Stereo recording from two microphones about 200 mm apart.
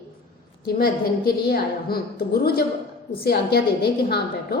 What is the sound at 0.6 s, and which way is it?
A woman's voice, 45° left (ahead or behind).